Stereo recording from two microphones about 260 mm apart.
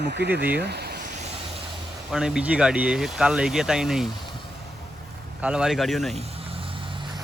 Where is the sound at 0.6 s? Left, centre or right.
Right.